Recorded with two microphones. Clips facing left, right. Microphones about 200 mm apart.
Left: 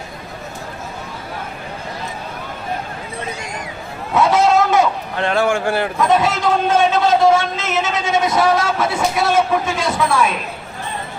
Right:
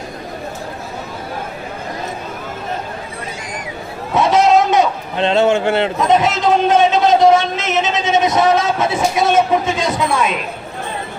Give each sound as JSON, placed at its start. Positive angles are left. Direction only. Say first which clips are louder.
{"t": 4.1, "sound": "a man's voice", "louder": "right 2 dB", "side_deg": -20}